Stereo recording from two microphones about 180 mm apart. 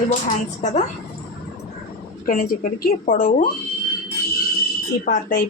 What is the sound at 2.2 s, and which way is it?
Speech, 50° left (ahead or behind).